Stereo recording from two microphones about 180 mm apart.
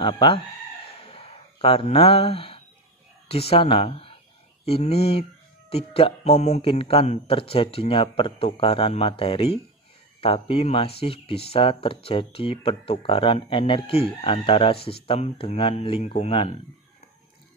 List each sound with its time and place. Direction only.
0.0 s speech: 30° left (ahead or behind)
1.0 s a sound: 30° left (ahead or behind)
3.3 s speech: 35° left (ahead or behind)